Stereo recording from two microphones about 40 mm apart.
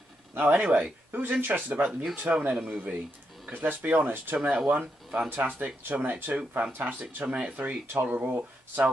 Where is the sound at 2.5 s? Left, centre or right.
Right.